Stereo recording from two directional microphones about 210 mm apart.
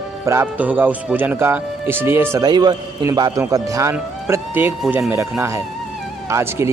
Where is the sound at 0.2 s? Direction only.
10° right (ahead or behind).